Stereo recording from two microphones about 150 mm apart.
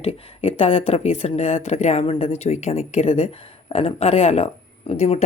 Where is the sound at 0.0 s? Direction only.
40° left (ahead or behind).